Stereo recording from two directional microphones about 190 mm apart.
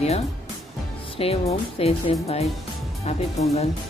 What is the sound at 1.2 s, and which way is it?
Speech, 30° left (ahead or behind).